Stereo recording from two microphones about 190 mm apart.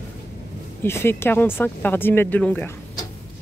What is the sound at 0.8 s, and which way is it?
Speech, 10° left (ahead or behind).